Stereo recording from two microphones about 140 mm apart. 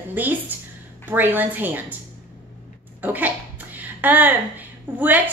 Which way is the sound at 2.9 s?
10° right (ahead or behind).